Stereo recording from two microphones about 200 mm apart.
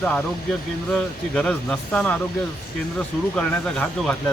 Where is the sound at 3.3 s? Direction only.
5° left (ahead or behind).